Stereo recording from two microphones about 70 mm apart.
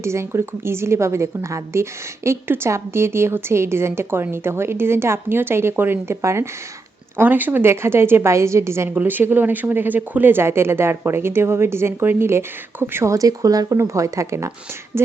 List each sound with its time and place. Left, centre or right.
0.0 s a woman's voice: right
7.2 s a woman's voice: right
9.0 s a woman's voice: right
13.1 s speech: right
13.7 s a woman's voice: right